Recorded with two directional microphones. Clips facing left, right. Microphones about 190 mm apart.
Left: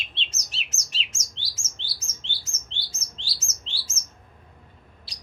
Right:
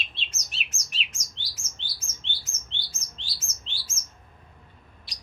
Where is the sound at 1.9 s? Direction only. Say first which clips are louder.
Even; 30° left (ahead or behind).